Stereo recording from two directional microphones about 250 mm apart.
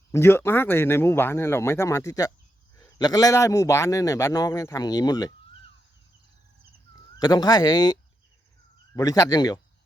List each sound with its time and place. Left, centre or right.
0.1 s a man's voice: centre
7.2 s a man's voice: centre
9.0 s a man's voice: centre